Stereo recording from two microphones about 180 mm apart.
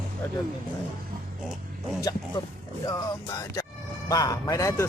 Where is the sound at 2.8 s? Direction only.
20° left (ahead or behind).